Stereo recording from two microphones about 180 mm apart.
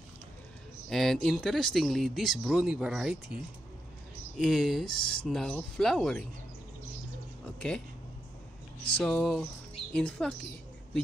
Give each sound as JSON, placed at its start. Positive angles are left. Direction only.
{"t": 0.8, "sound": "speech", "side_deg": 0}
{"t": 4.4, "sound": "speech", "side_deg": 0}
{"t": 7.4, "sound": "a sound", "side_deg": 5}
{"t": 8.9, "sound": "speech", "side_deg": 5}